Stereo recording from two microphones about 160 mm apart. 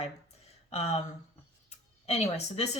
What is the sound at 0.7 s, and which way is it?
Speech, 45° left (ahead or behind).